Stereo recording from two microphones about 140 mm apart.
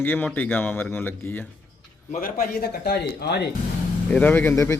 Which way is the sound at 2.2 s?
90° left.